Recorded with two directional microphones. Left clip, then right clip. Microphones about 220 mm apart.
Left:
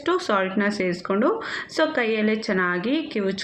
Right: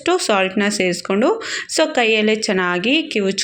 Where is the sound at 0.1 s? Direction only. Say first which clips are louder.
Right 5 dB; 25° right (ahead or behind).